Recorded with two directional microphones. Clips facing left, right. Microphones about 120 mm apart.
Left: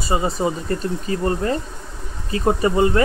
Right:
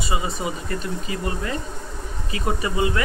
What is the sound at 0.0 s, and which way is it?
Speech, 35° left (ahead or behind).